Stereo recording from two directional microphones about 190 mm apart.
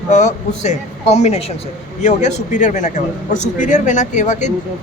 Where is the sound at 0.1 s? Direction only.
40° left (ahead or behind).